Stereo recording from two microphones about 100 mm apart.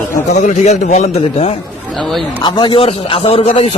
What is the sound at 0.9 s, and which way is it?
Speech, 90° left.